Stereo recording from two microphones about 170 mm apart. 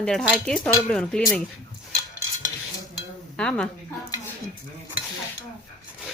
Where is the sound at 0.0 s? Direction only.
5° left (ahead or behind).